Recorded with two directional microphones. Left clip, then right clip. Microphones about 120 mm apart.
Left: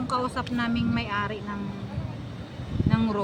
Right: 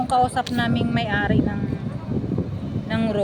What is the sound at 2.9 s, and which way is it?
Speech, 15° left (ahead or behind).